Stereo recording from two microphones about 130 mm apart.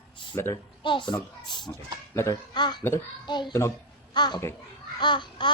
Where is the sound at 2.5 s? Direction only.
35° left (ahead or behind).